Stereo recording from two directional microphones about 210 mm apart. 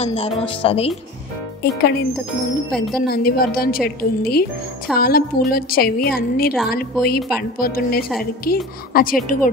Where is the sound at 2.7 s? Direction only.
Centre (ahead or behind).